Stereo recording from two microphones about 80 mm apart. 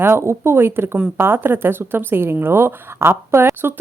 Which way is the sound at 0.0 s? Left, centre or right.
Right.